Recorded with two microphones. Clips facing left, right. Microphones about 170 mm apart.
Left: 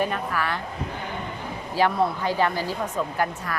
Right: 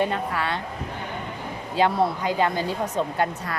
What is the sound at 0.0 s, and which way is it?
Speech, 25° right (ahead or behind).